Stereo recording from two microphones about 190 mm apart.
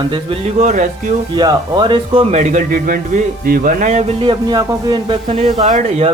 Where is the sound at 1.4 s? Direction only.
25° right (ahead or behind).